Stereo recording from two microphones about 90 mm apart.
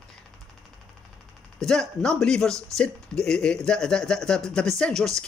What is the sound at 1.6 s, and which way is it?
Speech, 5° left (ahead or behind).